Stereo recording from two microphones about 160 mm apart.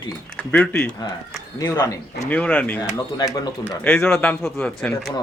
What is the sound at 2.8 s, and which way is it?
Speech, 20° left (ahead or behind).